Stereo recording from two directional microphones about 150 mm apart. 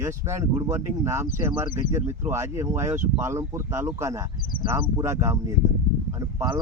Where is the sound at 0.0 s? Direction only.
20° right (ahead or behind).